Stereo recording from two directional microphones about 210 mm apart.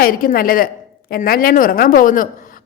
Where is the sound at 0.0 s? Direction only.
45° left (ahead or behind).